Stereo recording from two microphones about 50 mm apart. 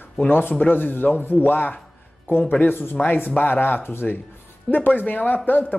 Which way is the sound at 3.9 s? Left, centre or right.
Left.